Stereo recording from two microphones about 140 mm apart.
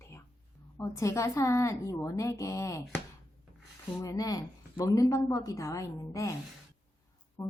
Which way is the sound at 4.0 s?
25° left (ahead or behind).